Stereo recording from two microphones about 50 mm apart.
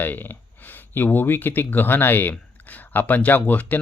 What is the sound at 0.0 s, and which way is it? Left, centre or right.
Speech, left.